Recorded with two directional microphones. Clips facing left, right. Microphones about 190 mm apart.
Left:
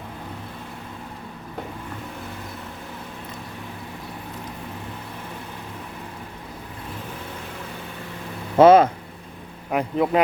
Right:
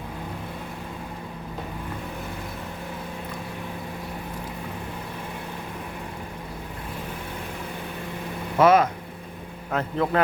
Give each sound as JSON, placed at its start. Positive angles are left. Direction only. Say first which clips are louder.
{"t": 8.5, "sound": "speech", "louder": "left 5 dB", "side_deg": 30}
{"t": 9.7, "sound": "speech", "louder": "left 3 dB", "side_deg": 15}